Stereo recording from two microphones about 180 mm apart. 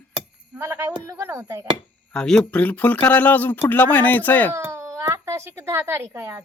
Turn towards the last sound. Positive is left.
turn(degrees=-15)  # may be behind; listen again after turning